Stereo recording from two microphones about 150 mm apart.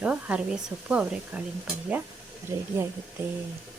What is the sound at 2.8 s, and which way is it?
Speech, 15° right (ahead or behind).